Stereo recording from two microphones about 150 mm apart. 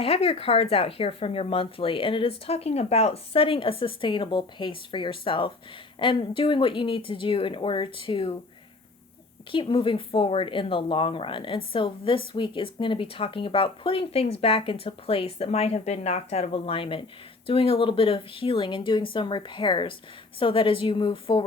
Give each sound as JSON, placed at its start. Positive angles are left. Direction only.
{"t": 0.0, "sound": "speech", "side_deg": 40}
{"t": 9.5, "sound": "speech", "side_deg": 35}